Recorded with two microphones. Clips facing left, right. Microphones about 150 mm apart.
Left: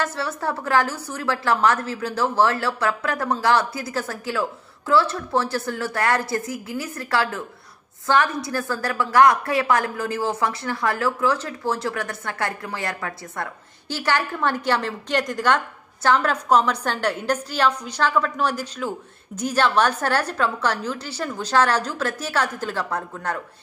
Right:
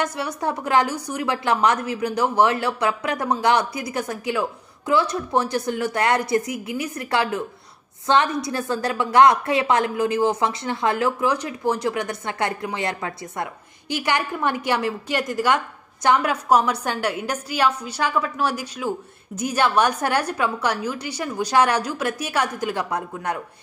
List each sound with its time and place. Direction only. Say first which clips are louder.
0.0 s a woman's voice: right 1 dB; 15° right (ahead or behind)